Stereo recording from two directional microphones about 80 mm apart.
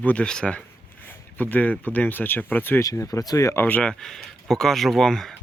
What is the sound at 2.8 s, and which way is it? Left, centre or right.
Speech, left.